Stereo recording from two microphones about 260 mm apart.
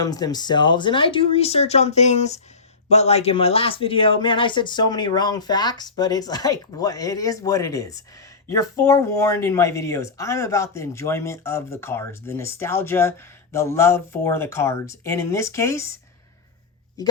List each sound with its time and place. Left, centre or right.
0.0 s speech: centre